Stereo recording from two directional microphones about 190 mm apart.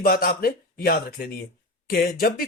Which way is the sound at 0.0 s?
50° left (ahead or behind).